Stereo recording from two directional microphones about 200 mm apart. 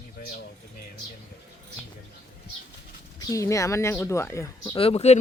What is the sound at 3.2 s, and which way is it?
Speech, 15° left (ahead or behind).